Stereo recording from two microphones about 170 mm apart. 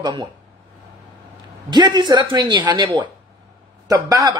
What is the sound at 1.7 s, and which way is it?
Speech, 25° right (ahead or behind).